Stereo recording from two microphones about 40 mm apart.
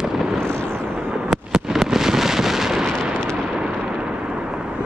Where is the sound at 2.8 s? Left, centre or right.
Centre.